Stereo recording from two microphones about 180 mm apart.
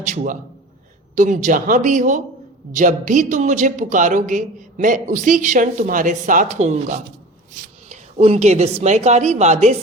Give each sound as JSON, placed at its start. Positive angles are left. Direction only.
{"t": 0.0, "sound": "a man's voice", "side_deg": -45}